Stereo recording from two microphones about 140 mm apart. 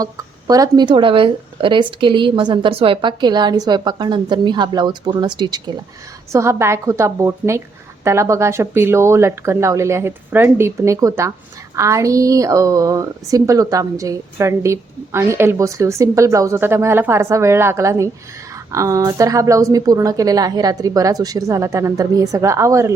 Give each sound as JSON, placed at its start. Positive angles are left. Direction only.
{"t": 0.0, "sound": "a woman's voice", "side_deg": -25}